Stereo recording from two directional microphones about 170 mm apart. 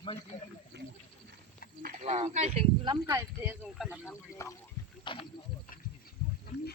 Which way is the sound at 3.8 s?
10° left (ahead or behind).